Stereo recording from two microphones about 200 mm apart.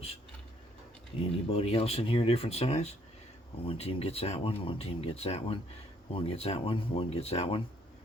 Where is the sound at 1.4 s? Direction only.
30° left (ahead or behind).